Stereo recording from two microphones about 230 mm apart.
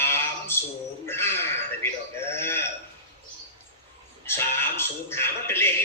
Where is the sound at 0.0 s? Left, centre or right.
Centre.